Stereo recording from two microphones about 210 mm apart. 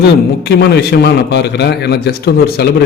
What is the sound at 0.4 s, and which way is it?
A man's voice, 50° left (ahead or behind).